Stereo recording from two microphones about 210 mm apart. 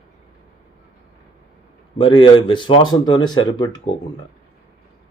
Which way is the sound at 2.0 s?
25° left (ahead or behind).